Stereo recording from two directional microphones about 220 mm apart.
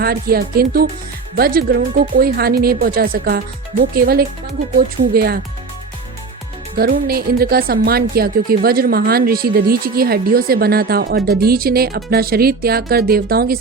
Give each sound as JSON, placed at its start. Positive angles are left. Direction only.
{"t": 0.0, "sound": "a woman's voice", "side_deg": -45}
{"t": 6.7, "sound": "a woman's voice", "side_deg": -40}